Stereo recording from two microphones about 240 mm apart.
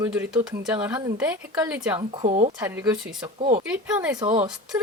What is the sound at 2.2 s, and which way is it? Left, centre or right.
Speech, right.